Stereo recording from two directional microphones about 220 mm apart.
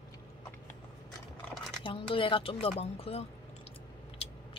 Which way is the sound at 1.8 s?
25° left (ahead or behind).